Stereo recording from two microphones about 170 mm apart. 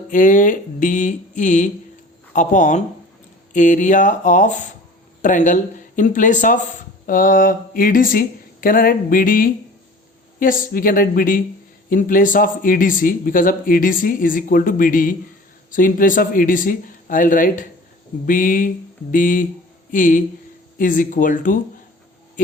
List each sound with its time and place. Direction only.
0.1 s a woman's voice: 50° left (ahead or behind)